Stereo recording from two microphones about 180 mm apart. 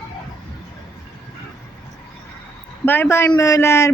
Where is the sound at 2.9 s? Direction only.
15° left (ahead or behind).